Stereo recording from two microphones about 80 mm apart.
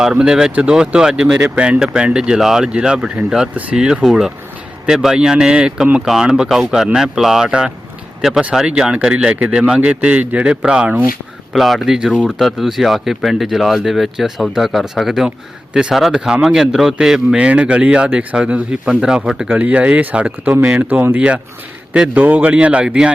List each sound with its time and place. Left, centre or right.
0.0 s speech: centre
11.5 s speech: centre
17.3 s speech: centre